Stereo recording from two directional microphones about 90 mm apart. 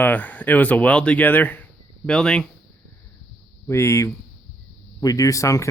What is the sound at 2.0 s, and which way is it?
Speech, 5° left (ahead or behind).